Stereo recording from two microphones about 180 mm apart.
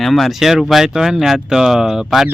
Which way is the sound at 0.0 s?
Centre (ahead or behind).